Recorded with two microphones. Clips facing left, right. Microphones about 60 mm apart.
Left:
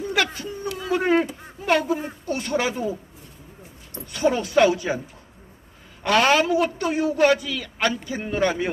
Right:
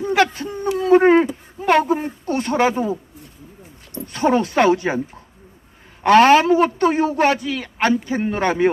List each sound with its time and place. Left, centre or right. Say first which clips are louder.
0.0 s a sound: right 6 dB; right
4.0 s speech: right 4 dB; right
6.0 s a man's voice: right 7 dB; right